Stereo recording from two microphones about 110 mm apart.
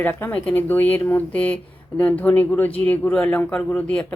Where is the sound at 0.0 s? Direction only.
15° left (ahead or behind).